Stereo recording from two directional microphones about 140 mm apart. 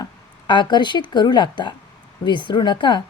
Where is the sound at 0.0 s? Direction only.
35° left (ahead or behind).